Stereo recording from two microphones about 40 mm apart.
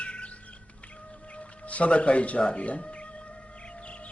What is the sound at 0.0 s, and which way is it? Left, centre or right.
Music, left.